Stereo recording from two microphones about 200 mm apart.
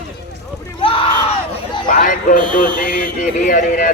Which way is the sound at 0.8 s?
25° left (ahead or behind).